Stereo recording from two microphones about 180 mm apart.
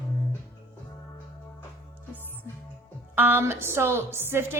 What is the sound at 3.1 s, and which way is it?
Speech, 10° right (ahead or behind).